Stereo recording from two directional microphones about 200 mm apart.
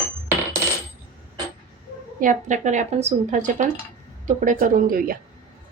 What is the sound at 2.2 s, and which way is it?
A woman's voice, 40° right (ahead or behind).